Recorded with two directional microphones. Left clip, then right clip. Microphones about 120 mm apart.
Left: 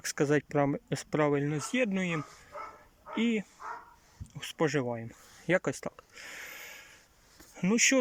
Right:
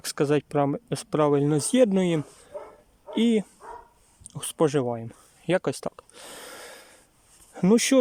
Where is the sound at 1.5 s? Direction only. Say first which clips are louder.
Right 10 dB; 50° right (ahead or behind).